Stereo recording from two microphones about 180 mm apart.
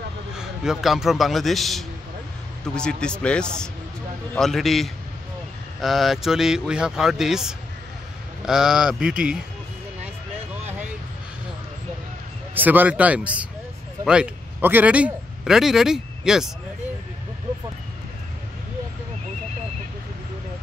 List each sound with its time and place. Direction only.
0.4 s speech: 5° right (ahead or behind)
12.5 s a man's voice: 10° right (ahead or behind)